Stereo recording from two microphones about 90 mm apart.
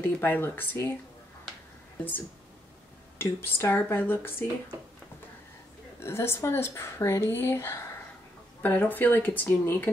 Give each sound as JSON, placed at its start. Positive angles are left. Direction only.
{"t": 0.0, "sound": "speech", "side_deg": 25}
{"t": 3.2, "sound": "speech", "side_deg": 25}
{"t": 5.9, "sound": "speech", "side_deg": 30}